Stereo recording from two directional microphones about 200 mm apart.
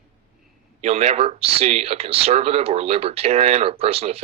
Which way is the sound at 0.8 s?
35° right (ahead or behind).